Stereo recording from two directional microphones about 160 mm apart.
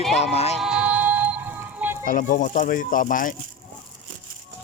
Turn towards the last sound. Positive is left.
turn(degrees=55)  # may be behind; listen again after turning